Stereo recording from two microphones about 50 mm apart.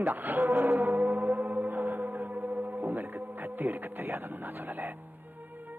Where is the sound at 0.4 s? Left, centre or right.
Right.